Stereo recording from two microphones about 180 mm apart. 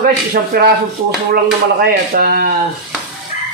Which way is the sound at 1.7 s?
55° right (ahead or behind).